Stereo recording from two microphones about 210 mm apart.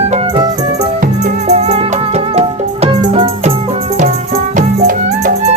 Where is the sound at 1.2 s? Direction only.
30° right (ahead or behind).